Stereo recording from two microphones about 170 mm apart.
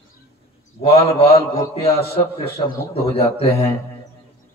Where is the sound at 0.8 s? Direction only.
35° left (ahead or behind).